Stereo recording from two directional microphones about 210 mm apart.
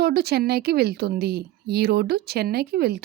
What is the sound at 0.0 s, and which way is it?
Speech, 50° right (ahead or behind).